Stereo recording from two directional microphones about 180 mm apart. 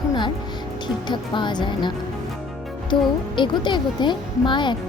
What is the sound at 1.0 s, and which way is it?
Speech, 25° left (ahead or behind).